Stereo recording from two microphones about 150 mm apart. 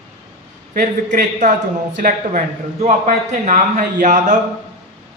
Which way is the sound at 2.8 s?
55° right (ahead or behind).